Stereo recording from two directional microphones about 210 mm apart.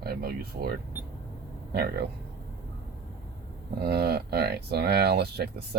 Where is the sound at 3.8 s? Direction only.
50° right (ahead or behind).